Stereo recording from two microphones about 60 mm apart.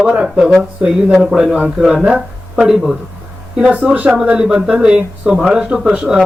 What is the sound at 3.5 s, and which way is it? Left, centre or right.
Speech, centre.